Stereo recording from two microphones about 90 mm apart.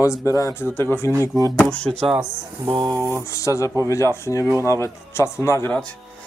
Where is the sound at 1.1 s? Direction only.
35° right (ahead or behind).